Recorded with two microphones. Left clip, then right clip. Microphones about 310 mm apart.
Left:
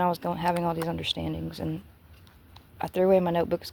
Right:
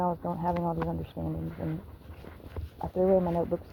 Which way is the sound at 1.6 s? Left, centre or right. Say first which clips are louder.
Left 2 dB; left.